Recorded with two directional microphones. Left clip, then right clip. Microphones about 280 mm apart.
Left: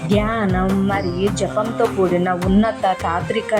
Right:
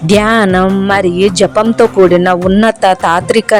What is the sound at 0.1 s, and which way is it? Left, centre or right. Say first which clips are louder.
A woman's voice: right 11 dB; right.